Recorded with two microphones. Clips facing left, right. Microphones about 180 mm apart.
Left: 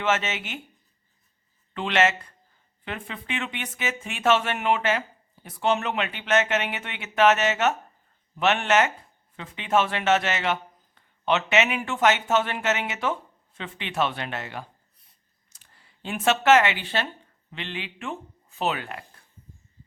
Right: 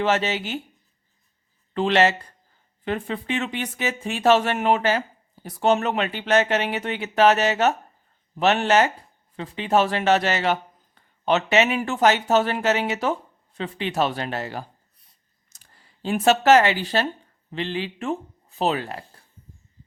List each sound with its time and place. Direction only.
0.0 s speech: 35° right (ahead or behind)
1.7 s speech: 35° right (ahead or behind)